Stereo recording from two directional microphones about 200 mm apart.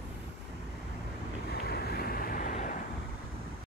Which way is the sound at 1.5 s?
50° left (ahead or behind).